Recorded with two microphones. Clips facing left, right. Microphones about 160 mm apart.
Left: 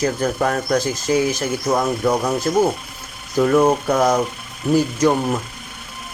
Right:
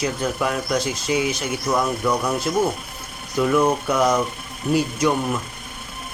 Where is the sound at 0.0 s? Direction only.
45° left (ahead or behind).